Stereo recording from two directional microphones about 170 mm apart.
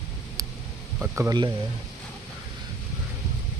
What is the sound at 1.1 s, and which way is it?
Speech, 15° right (ahead or behind).